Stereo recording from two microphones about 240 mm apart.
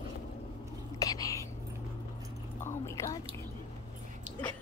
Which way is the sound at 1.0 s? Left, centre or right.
Centre.